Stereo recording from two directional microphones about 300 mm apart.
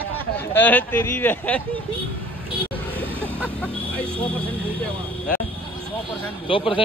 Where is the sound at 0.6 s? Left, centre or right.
Centre.